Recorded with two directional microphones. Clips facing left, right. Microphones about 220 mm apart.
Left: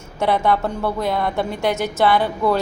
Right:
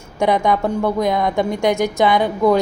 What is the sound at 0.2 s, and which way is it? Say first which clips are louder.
A woman's voice: right 2 dB; 15° right (ahead or behind).